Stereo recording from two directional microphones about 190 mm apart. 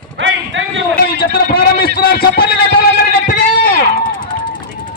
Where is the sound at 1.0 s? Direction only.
50° left (ahead or behind).